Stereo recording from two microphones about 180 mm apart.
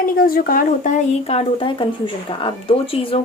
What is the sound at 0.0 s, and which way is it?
Speech, 50° left (ahead or behind).